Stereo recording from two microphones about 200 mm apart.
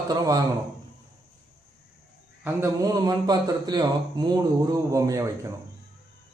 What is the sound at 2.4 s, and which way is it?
A man's voice, 15° right (ahead or behind).